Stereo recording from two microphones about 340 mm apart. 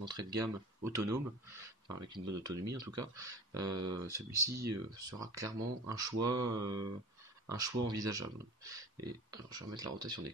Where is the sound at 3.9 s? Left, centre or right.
Centre.